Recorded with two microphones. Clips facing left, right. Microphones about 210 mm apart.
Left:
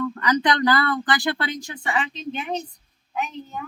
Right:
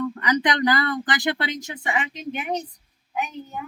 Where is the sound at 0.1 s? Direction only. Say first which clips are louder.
Left 1 dB; 25° right (ahead or behind).